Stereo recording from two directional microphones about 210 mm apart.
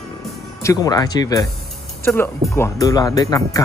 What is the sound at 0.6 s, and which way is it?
Speech, 15° left (ahead or behind).